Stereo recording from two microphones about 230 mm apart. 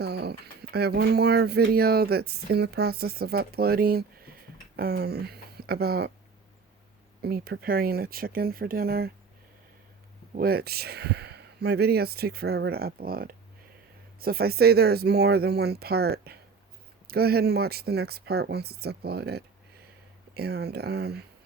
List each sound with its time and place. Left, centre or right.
0.0 s speech: right
7.2 s speech: right
10.3 s speech: right